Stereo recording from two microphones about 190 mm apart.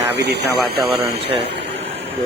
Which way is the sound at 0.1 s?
60° right (ahead or behind).